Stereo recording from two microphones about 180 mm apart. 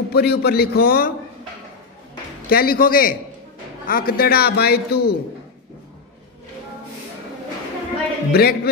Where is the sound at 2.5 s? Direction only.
55° left (ahead or behind).